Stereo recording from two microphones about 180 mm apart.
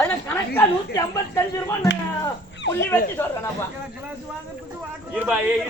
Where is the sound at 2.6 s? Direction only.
75° left (ahead or behind).